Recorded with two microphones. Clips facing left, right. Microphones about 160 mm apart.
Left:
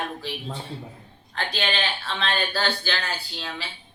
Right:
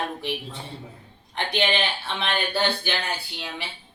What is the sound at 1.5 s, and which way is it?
Speech, 20° right (ahead or behind).